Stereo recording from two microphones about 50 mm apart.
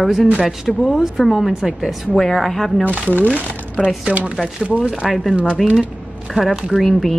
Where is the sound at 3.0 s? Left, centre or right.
Left.